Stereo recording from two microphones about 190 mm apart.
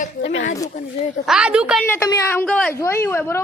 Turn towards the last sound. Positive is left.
turn(degrees=10)  # may be behind; listen again after turning